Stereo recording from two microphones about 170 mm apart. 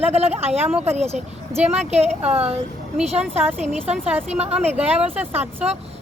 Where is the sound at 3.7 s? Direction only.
40° right (ahead or behind).